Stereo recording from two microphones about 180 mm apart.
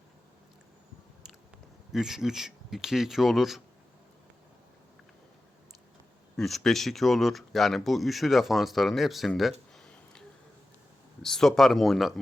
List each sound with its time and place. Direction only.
1.9 s speech: centre (ahead or behind)
6.3 s speech: centre (ahead or behind)